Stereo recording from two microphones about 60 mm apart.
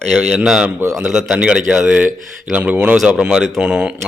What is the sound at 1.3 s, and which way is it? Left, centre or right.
Speech, centre.